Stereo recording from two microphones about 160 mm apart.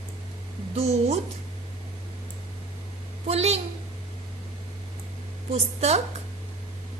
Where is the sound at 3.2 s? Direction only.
40° right (ahead or behind).